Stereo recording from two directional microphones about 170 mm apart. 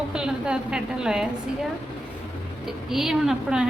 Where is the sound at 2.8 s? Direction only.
Centre (ahead or behind).